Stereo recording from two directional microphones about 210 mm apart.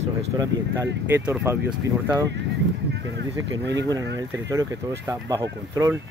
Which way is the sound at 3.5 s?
60° right (ahead or behind).